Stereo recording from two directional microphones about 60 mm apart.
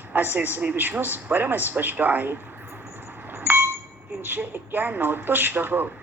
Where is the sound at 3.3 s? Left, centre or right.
Right.